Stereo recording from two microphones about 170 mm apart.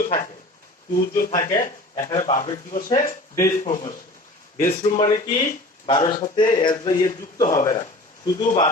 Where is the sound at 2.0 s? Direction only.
20° left (ahead or behind).